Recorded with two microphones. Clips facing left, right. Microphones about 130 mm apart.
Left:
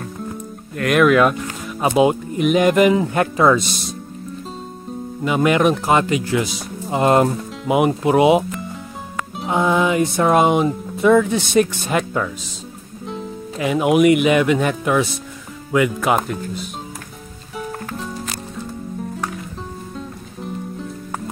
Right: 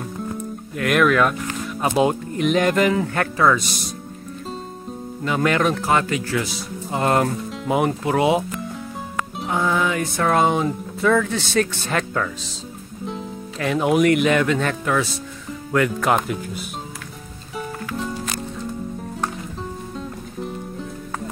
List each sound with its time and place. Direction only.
0.7 s speech: centre (ahead or behind); by 3.6 s 20° left (ahead or behind)
5.2 s speech: 10° left (ahead or behind)
7.6 s speech: 10° left (ahead or behind)
9.5 s speech: 20° left (ahead or behind)
13.6 s speech: 10° left (ahead or behind)